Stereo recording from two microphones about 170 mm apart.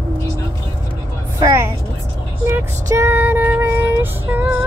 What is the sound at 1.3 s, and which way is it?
Vehicle, 20° right (ahead or behind).